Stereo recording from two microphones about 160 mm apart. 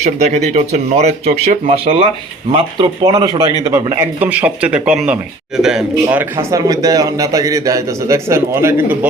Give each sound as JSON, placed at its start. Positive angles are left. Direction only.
{"t": 0.0, "sound": "speech", "side_deg": -45}